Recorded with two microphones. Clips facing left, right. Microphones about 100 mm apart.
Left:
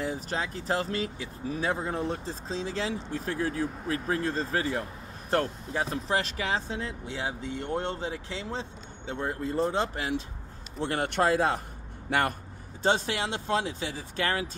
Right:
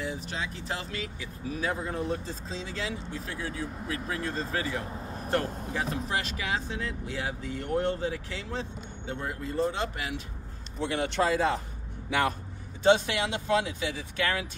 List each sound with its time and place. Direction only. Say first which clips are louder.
0.0 s speech: left 3 dB; 40° left (ahead or behind)
10.8 s a man's voice: left 1 dB; 50° left (ahead or behind)
12.8 s speech: right 3 dB; 40° left (ahead or behind)